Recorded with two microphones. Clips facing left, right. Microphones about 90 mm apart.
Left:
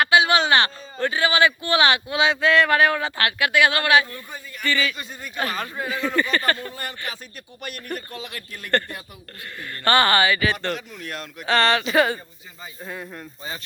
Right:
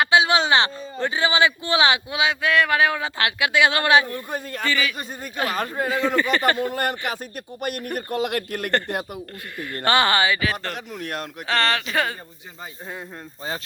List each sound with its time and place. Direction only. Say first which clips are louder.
0.0 s a man's voice: even; 20° right (ahead or behind)
4.3 s speech: right 8 dB; 65° right (ahead or behind)
4.6 s a man's voice: left 1 dB; 10° right (ahead or behind)
5.5 s speech: right 4 dB; 45° right (ahead or behind)
6.1 s a man's voice: even; 10° right (ahead or behind)
6.7 s speech: right 8 dB; 60° right (ahead or behind)
9.8 s a man's voice: left 1 dB; 15° right (ahead or behind)
10.4 s speech: left 2 dB; centre (ahead or behind)
10.8 s speech: right 4 dB; 55° right (ahead or behind)
11.4 s speech: left 3 dB; centre (ahead or behind)
12.8 s speech: left 2 dB; 25° right (ahead or behind)